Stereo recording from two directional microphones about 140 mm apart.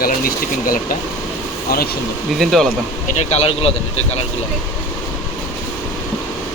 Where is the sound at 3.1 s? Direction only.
45° left (ahead or behind).